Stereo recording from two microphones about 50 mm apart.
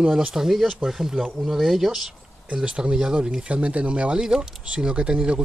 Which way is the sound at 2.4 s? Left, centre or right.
Right.